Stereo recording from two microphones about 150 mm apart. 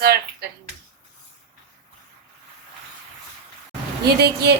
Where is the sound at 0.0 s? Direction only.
90° right.